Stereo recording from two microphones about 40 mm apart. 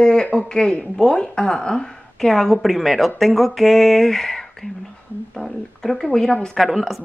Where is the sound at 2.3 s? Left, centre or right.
Centre.